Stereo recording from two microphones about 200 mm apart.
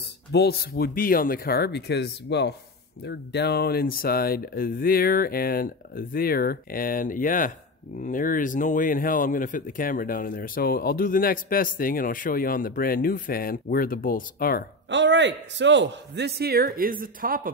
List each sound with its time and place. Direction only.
0.3 s speech: 55° left (ahead or behind)
14.9 s a man's voice: 60° right (ahead or behind); by 17.5 s 45° right (ahead or behind)